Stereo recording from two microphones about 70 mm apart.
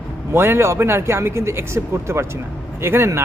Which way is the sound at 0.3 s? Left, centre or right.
Right.